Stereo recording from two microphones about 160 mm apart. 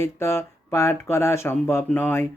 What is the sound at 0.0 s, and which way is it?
Speech, 15° left (ahead or behind).